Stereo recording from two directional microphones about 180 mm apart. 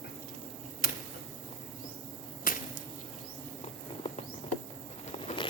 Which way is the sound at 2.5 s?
50° left (ahead or behind).